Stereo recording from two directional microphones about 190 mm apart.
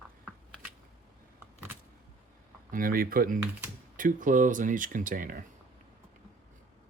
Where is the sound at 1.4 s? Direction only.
10° right (ahead or behind).